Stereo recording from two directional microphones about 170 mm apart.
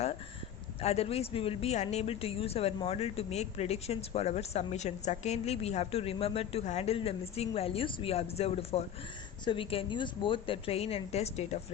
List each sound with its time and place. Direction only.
0.8 s speech: 35° left (ahead or behind)